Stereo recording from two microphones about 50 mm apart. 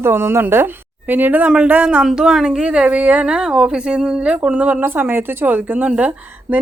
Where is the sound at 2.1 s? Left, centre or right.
Centre; by 3.2 s right.